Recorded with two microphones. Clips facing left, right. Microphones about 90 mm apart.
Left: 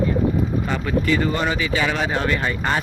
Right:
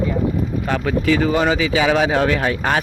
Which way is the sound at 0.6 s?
90° right.